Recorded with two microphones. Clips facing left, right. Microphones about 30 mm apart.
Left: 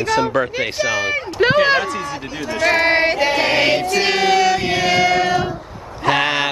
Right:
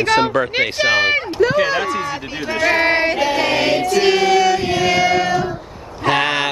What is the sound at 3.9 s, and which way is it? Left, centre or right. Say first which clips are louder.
Child singing: right 4 dB; centre.